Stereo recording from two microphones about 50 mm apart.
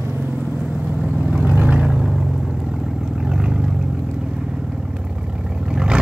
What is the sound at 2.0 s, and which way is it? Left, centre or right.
Vehicle, centre.